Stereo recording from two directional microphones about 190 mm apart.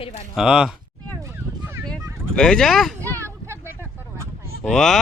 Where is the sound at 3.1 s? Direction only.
15° right (ahead or behind).